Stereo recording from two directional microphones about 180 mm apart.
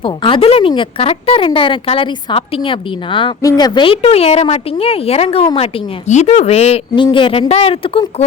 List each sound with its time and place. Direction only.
0.0 s speech: 30° left (ahead or behind)